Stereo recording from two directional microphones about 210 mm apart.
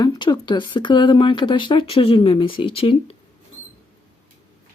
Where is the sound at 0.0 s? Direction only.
20° left (ahead or behind).